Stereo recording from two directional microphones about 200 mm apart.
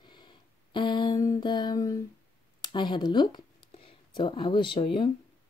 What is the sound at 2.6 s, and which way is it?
Speech, 20° left (ahead or behind).